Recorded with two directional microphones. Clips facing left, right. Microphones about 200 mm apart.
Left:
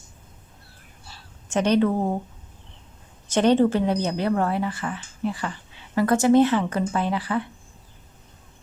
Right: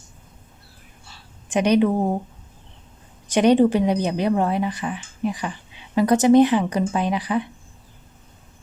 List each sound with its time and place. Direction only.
1.5 s a woman's voice: 15° right (ahead or behind)
3.3 s a woman's voice: 15° right (ahead or behind)